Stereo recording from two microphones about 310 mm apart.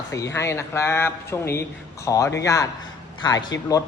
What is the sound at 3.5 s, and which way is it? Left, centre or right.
Speech, left.